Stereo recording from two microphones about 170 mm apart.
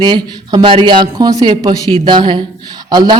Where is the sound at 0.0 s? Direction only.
25° right (ahead or behind).